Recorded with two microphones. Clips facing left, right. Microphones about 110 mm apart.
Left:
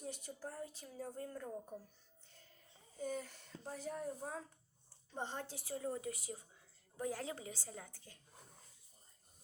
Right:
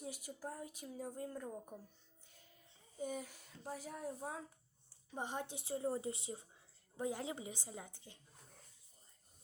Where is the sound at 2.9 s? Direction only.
15° right (ahead or behind).